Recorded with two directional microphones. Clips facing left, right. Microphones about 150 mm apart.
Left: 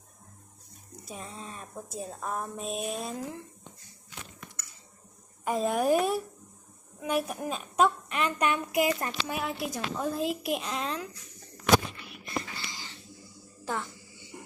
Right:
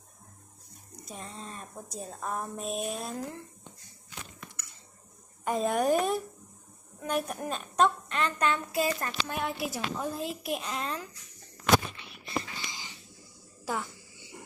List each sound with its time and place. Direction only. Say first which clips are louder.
1.0 s a woman's voice: left 1 dB; 5° left (ahead or behind)
5.5 s a woman's voice: left 1 dB; centre (ahead or behind); by 9.1 s 20° left (ahead or behind)
9.2 s a woman's voice: right 1 dB; 5° left (ahead or behind)
12.5 s a sound: even; 15° right (ahead or behind)
13.7 s a child's voice: even; 10° right (ahead or behind)